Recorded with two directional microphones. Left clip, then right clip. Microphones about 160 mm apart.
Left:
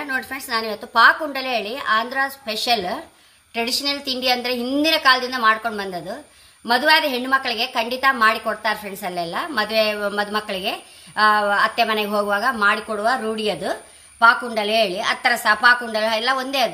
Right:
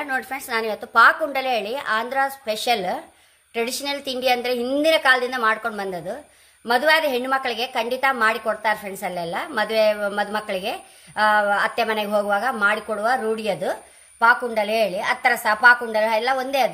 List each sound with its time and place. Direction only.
0.0 s a woman's voice: 45° right (ahead or behind)